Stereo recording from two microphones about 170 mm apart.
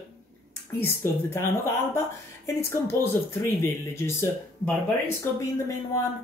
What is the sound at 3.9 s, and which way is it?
Speech, 15° left (ahead or behind).